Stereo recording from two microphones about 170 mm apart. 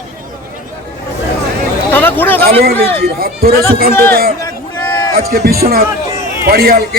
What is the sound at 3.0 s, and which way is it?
Speech, 65° right (ahead or behind).